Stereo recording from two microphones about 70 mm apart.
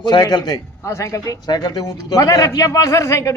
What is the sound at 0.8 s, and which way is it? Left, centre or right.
A man's voice, left.